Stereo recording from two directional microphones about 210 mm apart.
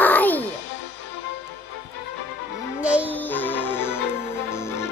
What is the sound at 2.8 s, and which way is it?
Music, 5° right (ahead or behind).